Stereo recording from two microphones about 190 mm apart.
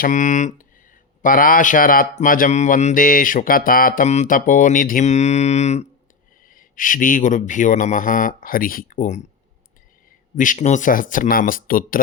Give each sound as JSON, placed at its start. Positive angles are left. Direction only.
{"t": 0.0, "sound": "speech", "side_deg": 45}
{"t": 10.3, "sound": "speech", "side_deg": 45}